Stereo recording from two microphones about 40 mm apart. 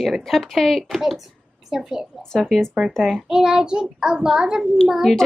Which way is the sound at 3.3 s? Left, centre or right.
Centre.